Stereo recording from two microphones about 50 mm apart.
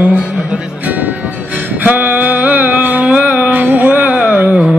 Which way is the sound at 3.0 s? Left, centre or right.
Right.